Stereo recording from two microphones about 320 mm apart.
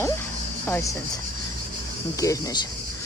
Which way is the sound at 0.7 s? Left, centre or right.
Centre.